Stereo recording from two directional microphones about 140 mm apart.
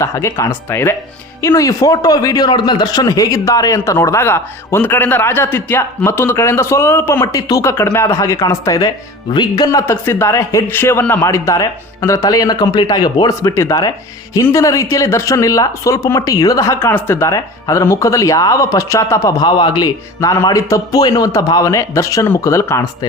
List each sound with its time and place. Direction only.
0.0 s speech: 20° left (ahead or behind)